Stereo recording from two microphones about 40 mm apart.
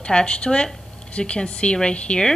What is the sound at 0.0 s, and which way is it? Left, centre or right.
Speech, left.